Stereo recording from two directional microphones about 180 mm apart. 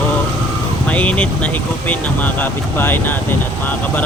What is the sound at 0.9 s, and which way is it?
Speech, 5° left (ahead or behind).